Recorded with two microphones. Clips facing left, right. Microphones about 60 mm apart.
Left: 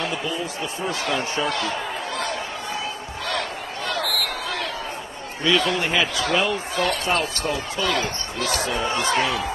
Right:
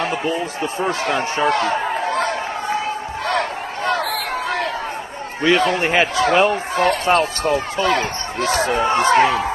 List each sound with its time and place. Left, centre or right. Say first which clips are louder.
0.0 s speech: right 5 dB; right
3.3 s a sound: right 6 dB; right
5.4 s a man's voice: right 5 dB; right